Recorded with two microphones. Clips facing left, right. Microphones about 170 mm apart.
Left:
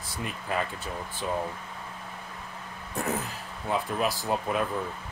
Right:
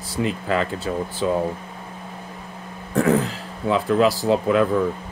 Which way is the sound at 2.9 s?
90° right.